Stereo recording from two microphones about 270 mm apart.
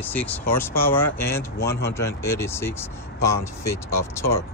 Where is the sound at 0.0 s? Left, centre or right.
Centre.